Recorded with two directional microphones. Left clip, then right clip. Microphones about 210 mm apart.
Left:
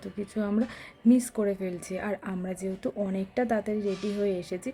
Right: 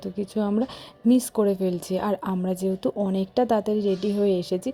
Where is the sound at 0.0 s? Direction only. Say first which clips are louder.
Right 6 dB; 15° right (ahead or behind).